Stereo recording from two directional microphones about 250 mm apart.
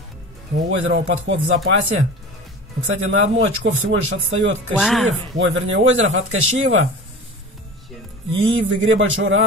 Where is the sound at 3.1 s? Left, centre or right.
Right.